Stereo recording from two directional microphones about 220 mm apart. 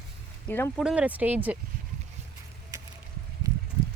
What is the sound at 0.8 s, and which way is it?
Speech, 5° right (ahead or behind).